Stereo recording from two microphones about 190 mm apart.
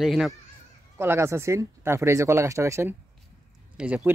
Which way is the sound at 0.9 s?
15° right (ahead or behind).